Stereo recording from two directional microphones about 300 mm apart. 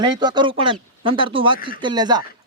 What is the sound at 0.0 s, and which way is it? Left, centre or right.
Speech, centre.